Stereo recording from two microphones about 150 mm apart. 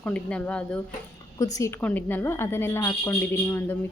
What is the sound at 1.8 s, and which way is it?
Speech, 10° left (ahead or behind).